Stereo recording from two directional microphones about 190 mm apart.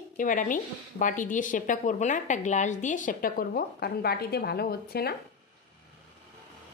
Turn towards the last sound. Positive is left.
turn(degrees=55)  # may be behind; listen again after turning